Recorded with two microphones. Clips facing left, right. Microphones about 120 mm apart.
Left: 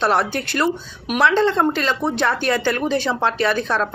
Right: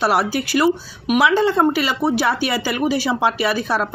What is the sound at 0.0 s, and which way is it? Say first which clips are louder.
Speech: right 1 dB; 10° right (ahead or behind).